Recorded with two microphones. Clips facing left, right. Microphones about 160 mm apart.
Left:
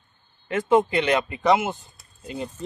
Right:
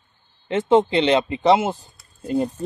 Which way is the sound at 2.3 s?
45° right (ahead or behind).